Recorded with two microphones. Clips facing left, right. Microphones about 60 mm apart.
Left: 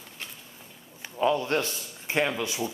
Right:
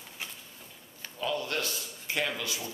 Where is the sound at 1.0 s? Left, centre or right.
Left.